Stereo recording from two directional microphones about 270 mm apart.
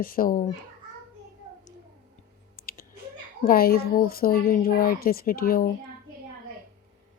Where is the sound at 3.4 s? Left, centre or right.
Left.